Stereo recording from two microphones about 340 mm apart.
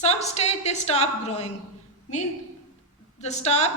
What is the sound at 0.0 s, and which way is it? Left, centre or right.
A woman's voice, centre.